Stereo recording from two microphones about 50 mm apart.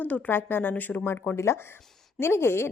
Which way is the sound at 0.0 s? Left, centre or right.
Left.